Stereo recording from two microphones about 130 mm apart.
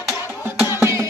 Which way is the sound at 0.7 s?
20° right (ahead or behind).